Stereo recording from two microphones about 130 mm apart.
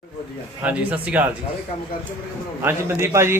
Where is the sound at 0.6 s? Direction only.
10° right (ahead or behind).